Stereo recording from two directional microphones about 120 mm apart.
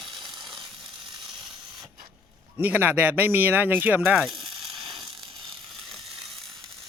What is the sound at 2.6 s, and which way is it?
Speech, 15° right (ahead or behind).